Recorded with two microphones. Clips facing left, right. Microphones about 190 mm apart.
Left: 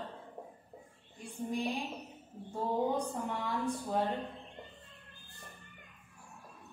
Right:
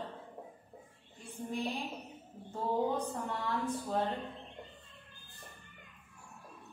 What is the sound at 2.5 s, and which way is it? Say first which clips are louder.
A woman's voice: even; 10° left (ahead or behind).